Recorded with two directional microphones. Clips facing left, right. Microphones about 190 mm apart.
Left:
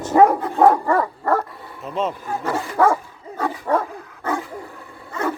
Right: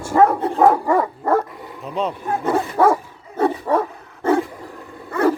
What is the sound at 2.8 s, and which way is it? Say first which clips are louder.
Dog: right 1 dB; 10° right (ahead or behind).